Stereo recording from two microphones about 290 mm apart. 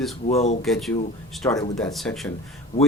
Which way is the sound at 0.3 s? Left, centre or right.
Left.